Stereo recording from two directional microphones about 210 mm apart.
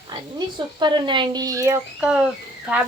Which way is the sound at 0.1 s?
20° right (ahead or behind).